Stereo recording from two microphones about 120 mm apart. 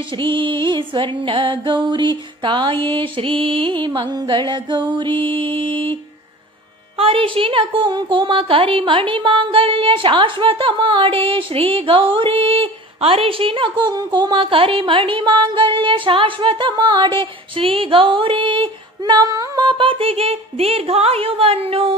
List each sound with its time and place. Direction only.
0.1 s a woman's voice: 45° right (ahead or behind)
7.0 s a woman's voice: 50° right (ahead or behind)